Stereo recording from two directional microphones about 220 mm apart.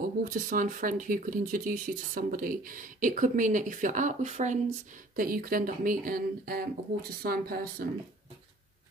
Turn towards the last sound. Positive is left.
turn(degrees=-45)  # may be behind; listen again after turning